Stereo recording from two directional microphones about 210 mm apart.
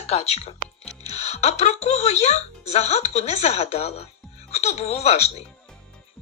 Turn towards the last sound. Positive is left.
turn(degrees=30)  # may be behind; listen again after turning